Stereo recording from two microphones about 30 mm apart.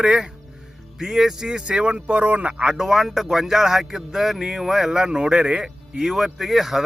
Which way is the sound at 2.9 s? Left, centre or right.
Centre.